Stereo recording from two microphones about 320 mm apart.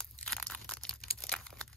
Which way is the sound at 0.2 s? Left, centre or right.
Centre.